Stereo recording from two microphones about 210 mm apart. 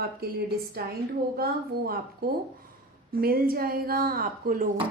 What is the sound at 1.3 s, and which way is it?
Speech, 45° right (ahead or behind).